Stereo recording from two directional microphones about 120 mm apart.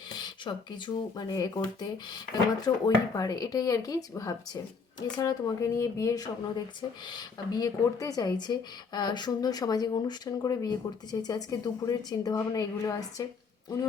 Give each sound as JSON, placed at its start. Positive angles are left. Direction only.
{"t": 0.2, "sound": "speech", "side_deg": 40}